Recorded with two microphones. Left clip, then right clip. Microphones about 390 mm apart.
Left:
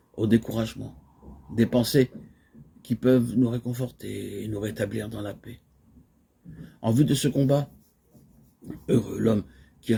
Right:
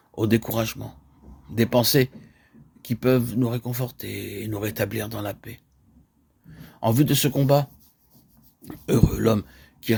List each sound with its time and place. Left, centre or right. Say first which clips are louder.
0.2 s speech: right 2 dB; right
6.6 s speech: right 3 dB; right